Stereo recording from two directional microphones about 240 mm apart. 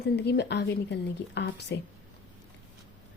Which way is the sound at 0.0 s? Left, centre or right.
Left.